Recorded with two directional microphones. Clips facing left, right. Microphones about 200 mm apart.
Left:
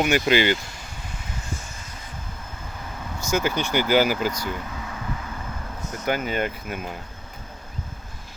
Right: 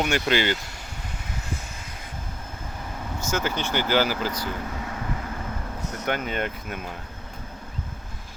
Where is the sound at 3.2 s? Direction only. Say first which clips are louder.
Left 4 dB; 10° left (ahead or behind).